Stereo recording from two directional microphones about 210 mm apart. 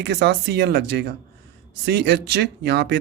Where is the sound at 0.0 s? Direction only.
55° right (ahead or behind).